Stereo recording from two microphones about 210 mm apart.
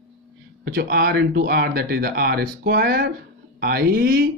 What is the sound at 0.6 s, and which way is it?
Speech, 50° right (ahead or behind).